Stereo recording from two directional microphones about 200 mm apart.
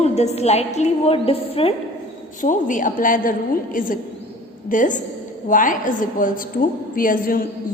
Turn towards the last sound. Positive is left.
turn(degrees=45)  # may be behind; listen again after turning